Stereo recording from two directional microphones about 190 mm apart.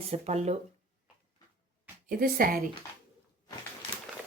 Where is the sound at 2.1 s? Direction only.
50° right (ahead or behind).